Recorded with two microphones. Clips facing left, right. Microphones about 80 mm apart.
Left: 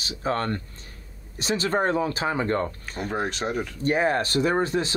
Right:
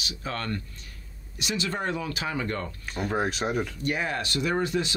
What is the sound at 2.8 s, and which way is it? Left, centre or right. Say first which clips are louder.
Speech: even; centre.